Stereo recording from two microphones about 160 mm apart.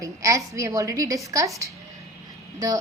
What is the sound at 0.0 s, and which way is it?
A woman's voice, 20° right (ahead or behind).